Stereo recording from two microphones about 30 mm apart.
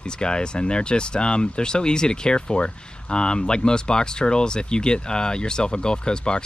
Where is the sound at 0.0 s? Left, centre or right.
Left.